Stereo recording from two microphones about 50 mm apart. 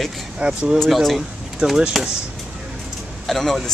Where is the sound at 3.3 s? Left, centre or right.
Centre.